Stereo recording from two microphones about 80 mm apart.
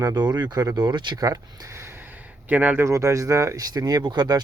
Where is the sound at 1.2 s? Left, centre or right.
Right.